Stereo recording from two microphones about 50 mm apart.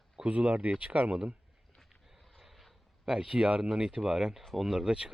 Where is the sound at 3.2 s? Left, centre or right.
Centre.